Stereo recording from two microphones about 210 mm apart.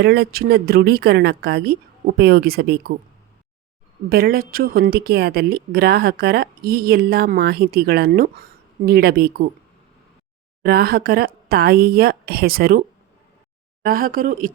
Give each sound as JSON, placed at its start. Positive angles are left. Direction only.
{"t": 0.0, "sound": "speech", "side_deg": -50}
{"t": 4.1, "sound": "speech", "side_deg": -45}
{"t": 10.6, "sound": "speech", "side_deg": -45}
{"t": 13.8, "sound": "speech", "side_deg": -45}